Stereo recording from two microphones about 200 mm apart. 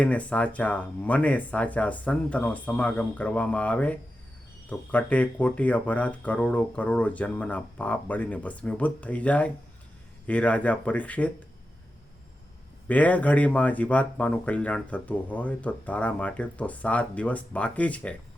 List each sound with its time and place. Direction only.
0.0 s speech: 5° left (ahead or behind)
12.9 s speech: 5° left (ahead or behind)